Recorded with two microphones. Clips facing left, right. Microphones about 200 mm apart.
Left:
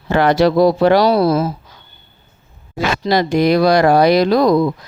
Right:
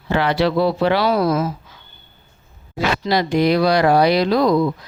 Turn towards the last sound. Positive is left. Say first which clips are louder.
# left 3 dB
turn(degrees=40)  # may be behind; listen again after turning